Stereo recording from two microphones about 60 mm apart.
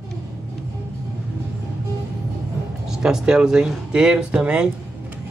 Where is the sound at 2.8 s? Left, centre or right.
Centre.